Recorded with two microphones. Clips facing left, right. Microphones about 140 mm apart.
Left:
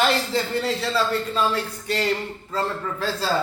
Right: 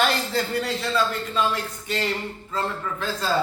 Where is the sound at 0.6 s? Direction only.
30° left (ahead or behind).